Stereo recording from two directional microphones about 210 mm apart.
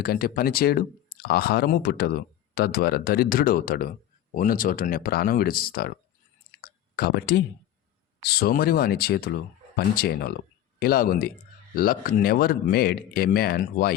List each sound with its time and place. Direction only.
0.0 s speech: 45° left (ahead or behind)
6.6 s clicking: 45° left (ahead or behind)
8.2 s speech: 50° left (ahead or behind)